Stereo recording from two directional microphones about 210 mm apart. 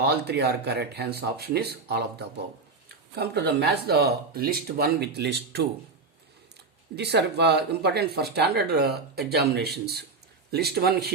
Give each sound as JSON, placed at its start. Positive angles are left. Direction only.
{"t": 0.0, "sound": "speech", "side_deg": -50}
{"t": 6.9, "sound": "speech", "side_deg": -50}